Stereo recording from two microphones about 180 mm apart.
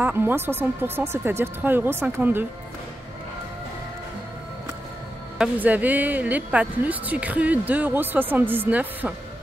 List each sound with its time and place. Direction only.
0.0 s speech: 10° right (ahead or behind)
5.4 s speech: 10° right (ahead or behind)